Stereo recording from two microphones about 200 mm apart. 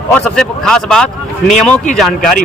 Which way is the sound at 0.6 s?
5° left (ahead or behind).